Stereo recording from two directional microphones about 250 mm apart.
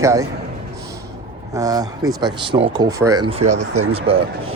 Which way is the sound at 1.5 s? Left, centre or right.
Centre.